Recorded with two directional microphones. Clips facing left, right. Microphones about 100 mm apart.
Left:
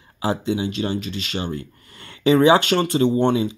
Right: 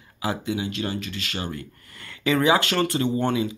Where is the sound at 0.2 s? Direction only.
30° left (ahead or behind).